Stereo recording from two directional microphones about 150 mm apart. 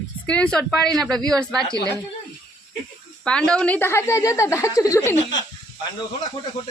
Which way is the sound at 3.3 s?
5° left (ahead or behind).